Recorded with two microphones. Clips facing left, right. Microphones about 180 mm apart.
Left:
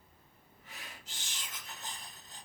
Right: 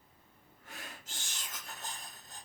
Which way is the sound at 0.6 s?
50° right (ahead or behind).